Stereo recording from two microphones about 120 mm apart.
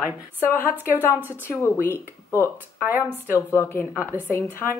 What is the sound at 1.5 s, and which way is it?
A woman's voice, 20° left (ahead or behind).